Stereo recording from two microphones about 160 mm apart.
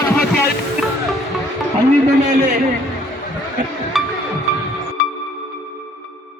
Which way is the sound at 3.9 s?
Centre (ahead or behind).